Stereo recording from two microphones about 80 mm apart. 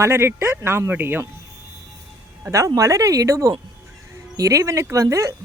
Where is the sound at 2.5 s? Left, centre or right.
Right.